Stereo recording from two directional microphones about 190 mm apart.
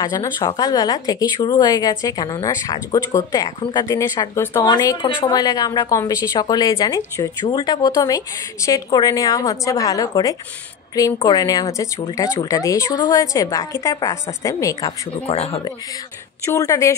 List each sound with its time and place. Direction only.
0.0 s speech: 20° left (ahead or behind)
15.2 s speech: 35° left (ahead or behind)
16.4 s speech: 15° left (ahead or behind)